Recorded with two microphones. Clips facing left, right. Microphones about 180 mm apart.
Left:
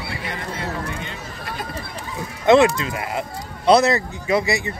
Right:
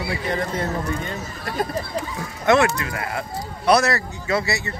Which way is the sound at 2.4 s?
20° left (ahead or behind).